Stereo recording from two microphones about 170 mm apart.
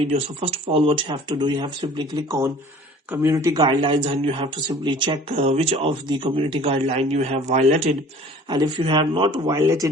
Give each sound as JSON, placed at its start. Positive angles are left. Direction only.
{"t": 0.1, "sound": "speech", "side_deg": -35}
{"t": 8.4, "sound": "speech", "side_deg": -25}